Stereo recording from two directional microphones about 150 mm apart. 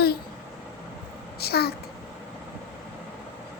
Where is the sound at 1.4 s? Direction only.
90° left.